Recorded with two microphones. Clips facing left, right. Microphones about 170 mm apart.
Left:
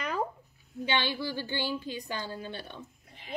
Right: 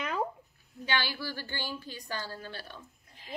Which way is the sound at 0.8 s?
20° left (ahead or behind).